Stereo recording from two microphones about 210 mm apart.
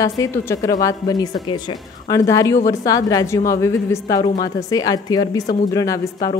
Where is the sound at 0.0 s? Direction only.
15° left (ahead or behind).